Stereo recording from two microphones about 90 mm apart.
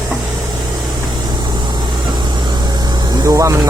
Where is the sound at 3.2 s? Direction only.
35° right (ahead or behind).